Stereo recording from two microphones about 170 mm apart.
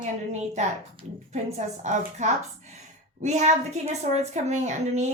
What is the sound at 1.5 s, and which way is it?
A woman's voice, 45° right (ahead or behind).